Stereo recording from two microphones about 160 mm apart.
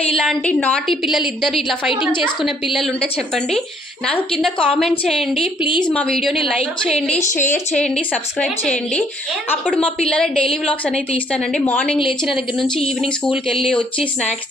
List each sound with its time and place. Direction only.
0.1 s a woman's voice: 5° left (ahead or behind)
2.0 s a woman's voice: 30° left (ahead or behind)
4.3 s a woman's voice: 5° left (ahead or behind)
13.6 s speech: 35° left (ahead or behind)